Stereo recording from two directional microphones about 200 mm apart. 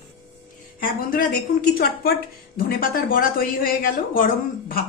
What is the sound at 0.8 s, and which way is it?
A woman's voice, 45° left (ahead or behind).